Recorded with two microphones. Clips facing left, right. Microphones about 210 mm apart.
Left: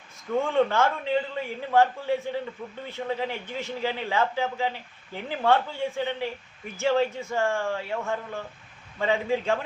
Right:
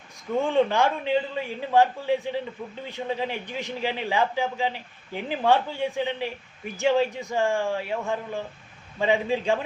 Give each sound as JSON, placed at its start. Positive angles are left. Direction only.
{"t": 0.5, "sound": "a man's voice", "side_deg": -15}